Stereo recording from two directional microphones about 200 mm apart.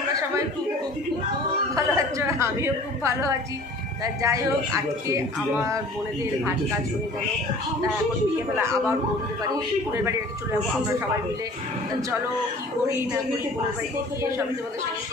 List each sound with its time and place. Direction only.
1.8 s a woman's voice: 15° right (ahead or behind)